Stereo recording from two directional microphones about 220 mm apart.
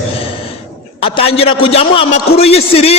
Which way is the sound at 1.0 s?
25° left (ahead or behind).